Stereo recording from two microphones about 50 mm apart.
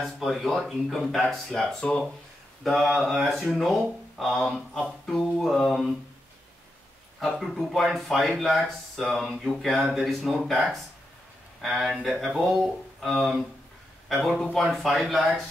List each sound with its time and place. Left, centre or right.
0.0 s speech: centre
1.8 s speech: centre
2.6 s speech: centre
7.2 s speech: centre
9.4 s mantra: centre
9.9 s speech: centre
11.6 s speech: centre
14.6 s speech: centre